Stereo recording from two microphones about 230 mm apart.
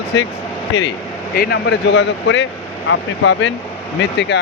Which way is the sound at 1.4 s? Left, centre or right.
Left.